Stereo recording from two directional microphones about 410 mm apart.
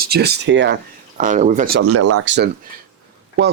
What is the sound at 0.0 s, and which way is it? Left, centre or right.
Speech, right.